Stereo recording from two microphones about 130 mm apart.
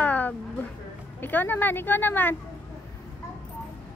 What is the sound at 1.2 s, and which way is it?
A woman's voice, 15° left (ahead or behind).